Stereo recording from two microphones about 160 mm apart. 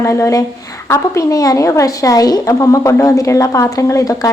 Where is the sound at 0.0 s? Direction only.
20° left (ahead or behind).